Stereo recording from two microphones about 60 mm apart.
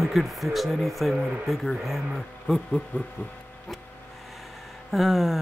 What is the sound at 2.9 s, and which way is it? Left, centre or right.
Speech, left.